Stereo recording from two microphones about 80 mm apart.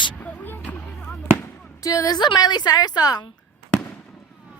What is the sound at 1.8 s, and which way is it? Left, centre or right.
A woman's voice, left.